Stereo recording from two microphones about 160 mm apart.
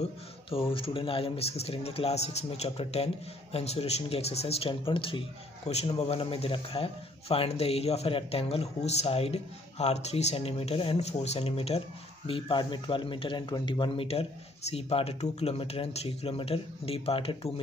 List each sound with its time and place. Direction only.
0.7 s speech: 35° left (ahead or behind)